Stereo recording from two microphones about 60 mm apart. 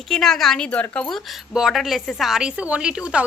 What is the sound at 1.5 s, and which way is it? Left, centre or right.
A woman's voice, centre.